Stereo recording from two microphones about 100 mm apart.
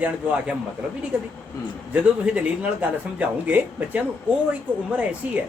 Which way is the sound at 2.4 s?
15° right (ahead or behind).